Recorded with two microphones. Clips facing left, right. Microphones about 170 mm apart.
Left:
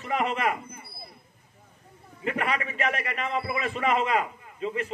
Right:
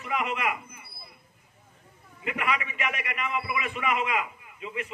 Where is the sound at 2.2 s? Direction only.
35° left (ahead or behind).